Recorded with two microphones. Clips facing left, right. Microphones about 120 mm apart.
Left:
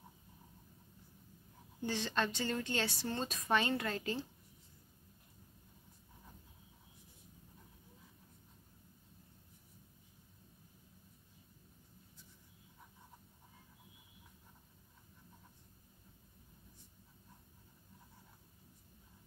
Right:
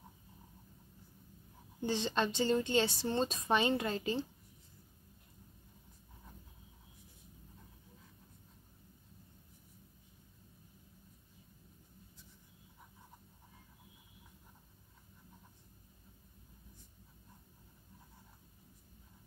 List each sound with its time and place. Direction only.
1.8 s a woman's voice: 20° right (ahead or behind)